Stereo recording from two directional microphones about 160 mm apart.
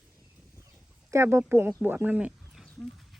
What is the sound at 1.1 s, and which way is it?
Speech, 15° right (ahead or behind).